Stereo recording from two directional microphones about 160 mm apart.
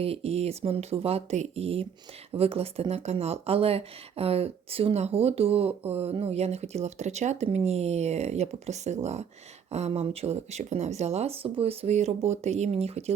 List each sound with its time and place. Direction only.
0.0 s speech: 40° right (ahead or behind)